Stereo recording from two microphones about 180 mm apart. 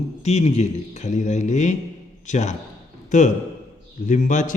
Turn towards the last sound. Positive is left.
turn(degrees=45)  # may be behind; listen again after turning